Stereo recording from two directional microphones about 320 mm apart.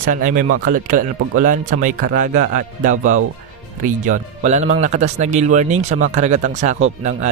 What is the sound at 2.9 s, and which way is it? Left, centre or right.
Speech, right.